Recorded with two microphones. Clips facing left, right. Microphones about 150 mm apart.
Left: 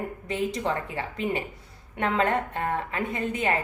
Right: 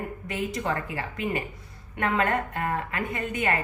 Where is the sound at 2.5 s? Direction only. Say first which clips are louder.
Left 1 dB; 25° left (ahead or behind).